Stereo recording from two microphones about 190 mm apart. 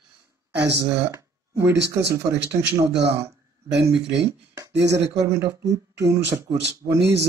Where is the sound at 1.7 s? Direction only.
65° right (ahead or behind).